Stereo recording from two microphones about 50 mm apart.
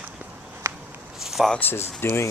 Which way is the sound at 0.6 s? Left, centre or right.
Right.